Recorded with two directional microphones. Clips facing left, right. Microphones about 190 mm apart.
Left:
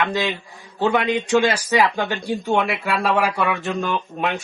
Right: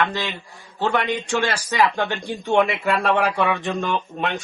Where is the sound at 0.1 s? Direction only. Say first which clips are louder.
Left 5 dB; 10° left (ahead or behind).